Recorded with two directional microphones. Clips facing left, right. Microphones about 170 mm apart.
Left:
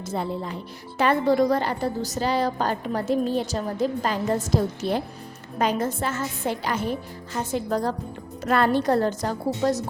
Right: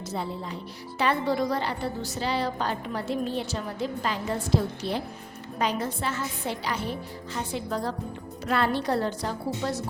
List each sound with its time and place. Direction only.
0.1 s a woman's voice: 50° left (ahead or behind)